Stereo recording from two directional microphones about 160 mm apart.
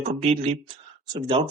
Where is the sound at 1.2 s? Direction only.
25° right (ahead or behind).